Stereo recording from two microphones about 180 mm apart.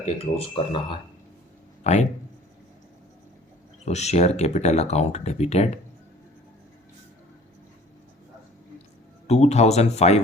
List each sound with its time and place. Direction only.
0.2 s speech: 30° left (ahead or behind)
3.8 s speech: 40° left (ahead or behind)
9.2 s speech: 35° left (ahead or behind)